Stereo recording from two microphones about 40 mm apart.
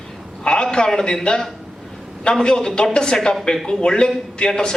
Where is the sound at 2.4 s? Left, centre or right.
Centre.